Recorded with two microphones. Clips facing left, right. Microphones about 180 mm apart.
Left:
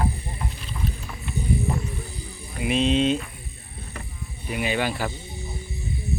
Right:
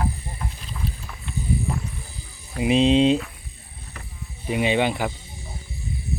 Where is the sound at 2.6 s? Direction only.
30° right (ahead or behind).